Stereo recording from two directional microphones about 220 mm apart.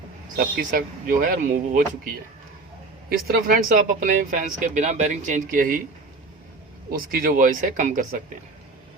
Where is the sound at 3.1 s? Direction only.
40° right (ahead or behind).